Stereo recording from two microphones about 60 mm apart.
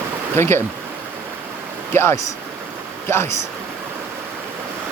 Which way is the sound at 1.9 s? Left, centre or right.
Left.